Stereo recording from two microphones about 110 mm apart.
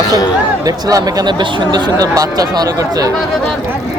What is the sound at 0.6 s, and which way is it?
Speech, 35° right (ahead or behind).